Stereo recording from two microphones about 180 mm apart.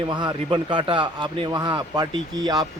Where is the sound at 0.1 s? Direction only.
25° right (ahead or behind).